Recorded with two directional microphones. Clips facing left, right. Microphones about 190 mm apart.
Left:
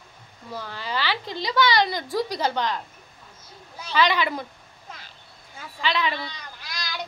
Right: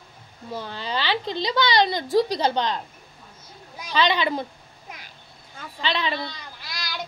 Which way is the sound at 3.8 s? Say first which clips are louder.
Even; 20° right (ahead or behind).